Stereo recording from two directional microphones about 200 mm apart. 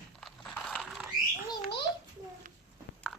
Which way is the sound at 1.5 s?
25° left (ahead or behind).